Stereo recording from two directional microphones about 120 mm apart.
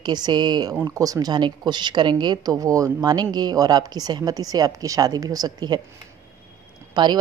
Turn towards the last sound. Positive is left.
turn(degrees=-40)  # may be behind; listen again after turning